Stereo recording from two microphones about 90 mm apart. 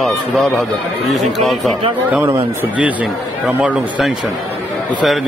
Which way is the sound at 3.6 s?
10° right (ahead or behind).